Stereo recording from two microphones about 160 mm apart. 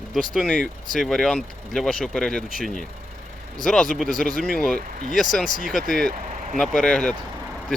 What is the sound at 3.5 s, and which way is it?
Speech, centre (ahead or behind).